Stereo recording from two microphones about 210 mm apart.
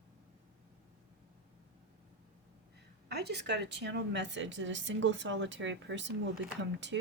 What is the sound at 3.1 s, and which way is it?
Speech, 50° right (ahead or behind).